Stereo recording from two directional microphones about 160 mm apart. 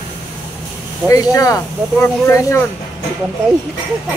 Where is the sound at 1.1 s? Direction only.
20° left (ahead or behind).